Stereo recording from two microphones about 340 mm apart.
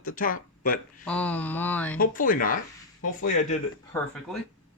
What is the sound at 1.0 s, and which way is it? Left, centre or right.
Mantra, centre.